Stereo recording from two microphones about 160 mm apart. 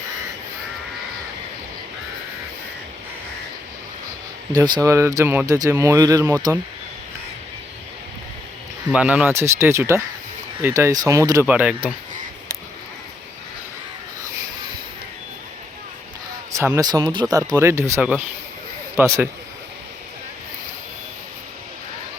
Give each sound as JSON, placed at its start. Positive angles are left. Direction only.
{"t": 4.5, "sound": "speech", "side_deg": -25}
{"t": 8.9, "sound": "speech", "side_deg": -5}
{"t": 11.4, "sound": "speech", "side_deg": -10}
{"t": 16.7, "sound": "speech", "side_deg": -25}
{"t": 17.6, "sound": "speech", "side_deg": -15}